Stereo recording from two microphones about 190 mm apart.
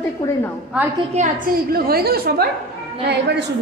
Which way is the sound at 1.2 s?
35° right (ahead or behind).